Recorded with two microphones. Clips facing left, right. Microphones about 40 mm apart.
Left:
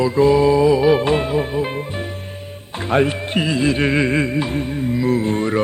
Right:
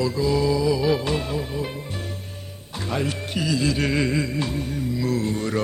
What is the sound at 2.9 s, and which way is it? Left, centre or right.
Music, left.